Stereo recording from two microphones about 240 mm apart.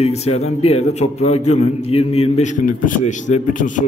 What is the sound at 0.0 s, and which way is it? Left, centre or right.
A man's voice, left.